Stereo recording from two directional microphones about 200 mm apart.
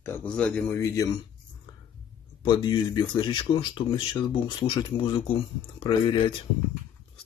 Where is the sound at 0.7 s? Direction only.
15° left (ahead or behind).